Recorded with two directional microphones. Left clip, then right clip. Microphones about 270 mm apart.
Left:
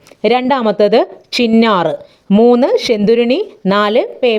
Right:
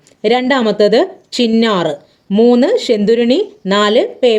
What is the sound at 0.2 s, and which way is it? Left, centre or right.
Speech, centre.